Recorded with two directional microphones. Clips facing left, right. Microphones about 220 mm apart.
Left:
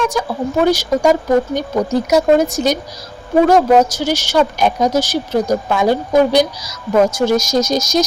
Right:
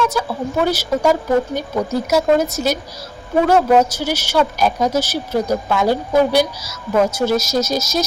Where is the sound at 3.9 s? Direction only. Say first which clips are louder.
Left 3 dB; 10° right (ahead or behind).